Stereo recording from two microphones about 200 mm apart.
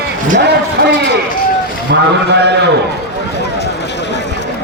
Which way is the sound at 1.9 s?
60° right (ahead or behind).